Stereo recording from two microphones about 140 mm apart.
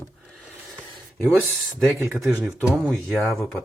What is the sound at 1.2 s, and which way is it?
Speech, centre (ahead or behind).